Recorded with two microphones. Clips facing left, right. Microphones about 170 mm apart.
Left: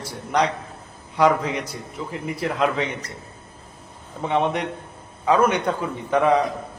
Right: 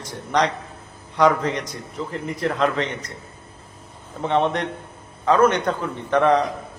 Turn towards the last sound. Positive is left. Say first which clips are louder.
# right 1 dB
turn(degrees=5)  # may be behind; listen again after turning